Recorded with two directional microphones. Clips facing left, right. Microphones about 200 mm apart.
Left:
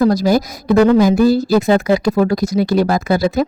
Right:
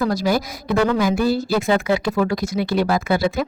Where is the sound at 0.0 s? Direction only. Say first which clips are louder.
Left 6 dB; 40° left (ahead or behind).